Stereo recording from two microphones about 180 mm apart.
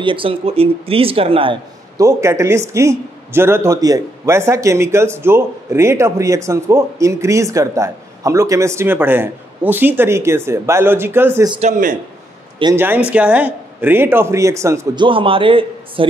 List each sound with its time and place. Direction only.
0.0 s speech: 30° right (ahead or behind)
2.0 s speech: 15° right (ahead or behind)
12.7 s speech: 10° right (ahead or behind)
15.0 s a man's voice: 30° right (ahead or behind)